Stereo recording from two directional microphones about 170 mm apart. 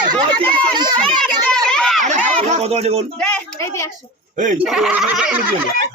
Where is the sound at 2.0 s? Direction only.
45° right (ahead or behind).